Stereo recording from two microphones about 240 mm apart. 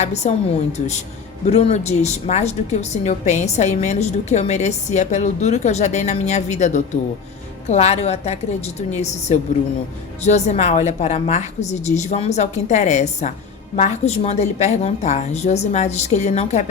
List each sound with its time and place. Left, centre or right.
0.0 s a woman's voice: left
1.5 s a woman's voice: left